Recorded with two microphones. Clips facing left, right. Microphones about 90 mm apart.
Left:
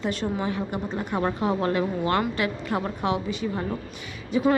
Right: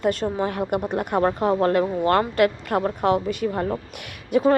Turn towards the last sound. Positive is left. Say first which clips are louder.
# right 4 dB
turn(degrees=-60)  # may be behind; listen again after turning